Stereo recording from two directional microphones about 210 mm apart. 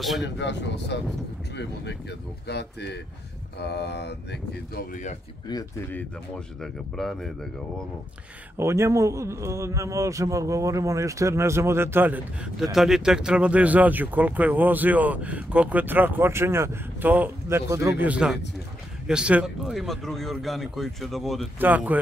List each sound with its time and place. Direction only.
0.4 s speech: 55° left (ahead or behind)
5.5 s speech: 15° left (ahead or behind)
8.5 s a man's voice: 15° right (ahead or behind)